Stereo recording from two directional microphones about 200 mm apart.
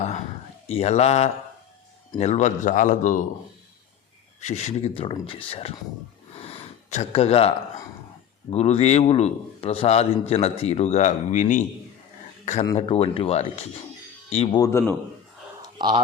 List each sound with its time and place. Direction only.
0.7 s a man's voice: 30° left (ahead or behind)
4.4 s speech: 35° left (ahead or behind)
6.4 s gasp: 30° left (ahead or behind)
8.4 s a man's voice: 30° left (ahead or behind)
12.7 s a man's voice: 30° left (ahead or behind)
14.6 s a man's voice: 15° left (ahead or behind)
15.6 s a sound: 20° right (ahead or behind)